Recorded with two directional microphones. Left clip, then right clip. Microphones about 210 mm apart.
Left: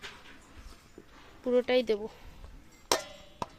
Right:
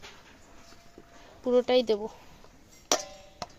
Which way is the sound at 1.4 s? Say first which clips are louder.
Right 3 dB; 10° right (ahead or behind).